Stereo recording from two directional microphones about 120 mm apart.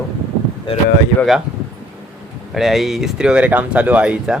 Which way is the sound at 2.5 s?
Centre (ahead or behind).